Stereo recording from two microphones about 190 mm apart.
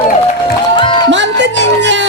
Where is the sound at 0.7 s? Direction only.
25° left (ahead or behind).